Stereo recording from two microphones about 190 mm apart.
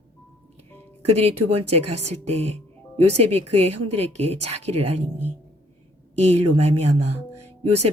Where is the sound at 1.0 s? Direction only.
35° right (ahead or behind).